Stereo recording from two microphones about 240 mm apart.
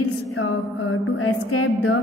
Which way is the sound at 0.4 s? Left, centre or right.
Left.